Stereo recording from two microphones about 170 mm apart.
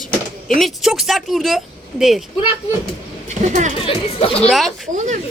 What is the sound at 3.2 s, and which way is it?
Speech, 45° right (ahead or behind).